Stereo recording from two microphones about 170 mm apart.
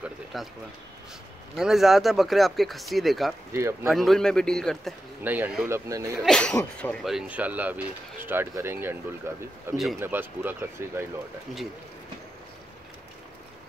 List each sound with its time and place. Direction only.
0.0 s a sound: centre (ahead or behind)
1.6 s speech: centre (ahead or behind)
3.5 s speech: 15° right (ahead or behind)
3.9 s speech: centre (ahead or behind)
5.2 s speech: 10° right (ahead or behind)
5.7 s speech: 20° right (ahead or behind)
6.2 s speech: 5° left (ahead or behind)